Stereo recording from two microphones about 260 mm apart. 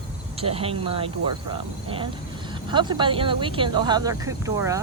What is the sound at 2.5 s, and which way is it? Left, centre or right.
Speech, centre.